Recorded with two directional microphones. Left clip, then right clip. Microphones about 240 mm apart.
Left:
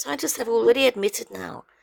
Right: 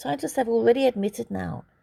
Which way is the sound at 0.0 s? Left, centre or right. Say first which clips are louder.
Right 1 dB; left.